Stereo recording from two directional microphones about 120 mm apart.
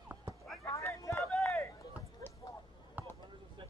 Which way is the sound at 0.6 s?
20° left (ahead or behind).